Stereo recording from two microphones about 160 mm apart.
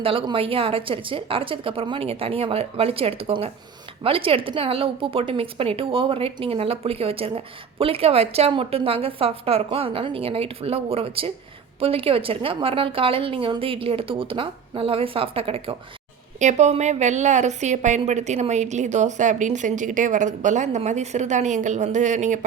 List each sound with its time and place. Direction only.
0.0 s a woman's voice: 35° right (ahead or behind)
16.4 s a woman's voice: 45° right (ahead or behind)